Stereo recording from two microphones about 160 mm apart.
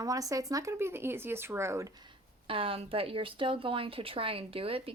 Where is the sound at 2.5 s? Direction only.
35° right (ahead or behind).